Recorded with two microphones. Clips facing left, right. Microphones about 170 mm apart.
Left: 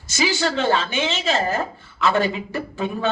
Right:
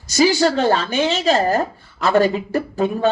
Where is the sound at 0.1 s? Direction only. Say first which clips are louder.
Right 7 dB; 40° right (ahead or behind).